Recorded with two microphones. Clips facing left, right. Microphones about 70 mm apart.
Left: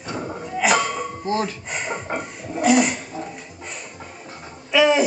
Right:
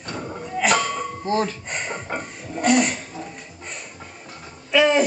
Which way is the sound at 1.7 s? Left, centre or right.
Centre.